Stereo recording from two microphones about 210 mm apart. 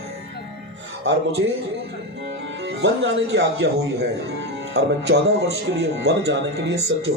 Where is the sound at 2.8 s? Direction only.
60° right (ahead or behind).